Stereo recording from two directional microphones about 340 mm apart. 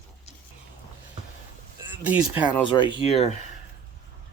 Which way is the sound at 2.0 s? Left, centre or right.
Centre.